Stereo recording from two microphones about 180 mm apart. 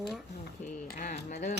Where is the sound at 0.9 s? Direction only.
45° left (ahead or behind).